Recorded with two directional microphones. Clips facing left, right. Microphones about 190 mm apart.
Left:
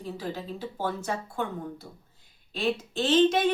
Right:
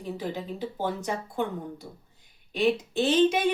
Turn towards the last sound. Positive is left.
turn(degrees=-10)  # may be behind; listen again after turning